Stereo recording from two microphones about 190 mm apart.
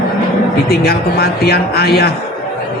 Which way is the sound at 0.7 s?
55° left (ahead or behind).